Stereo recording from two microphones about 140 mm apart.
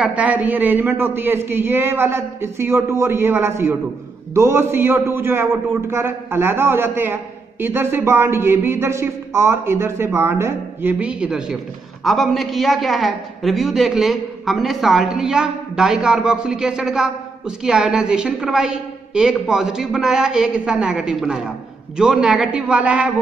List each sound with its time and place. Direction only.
0.0 s a man's voice: 10° right (ahead or behind)